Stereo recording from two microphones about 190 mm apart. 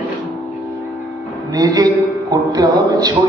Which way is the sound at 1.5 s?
20° right (ahead or behind).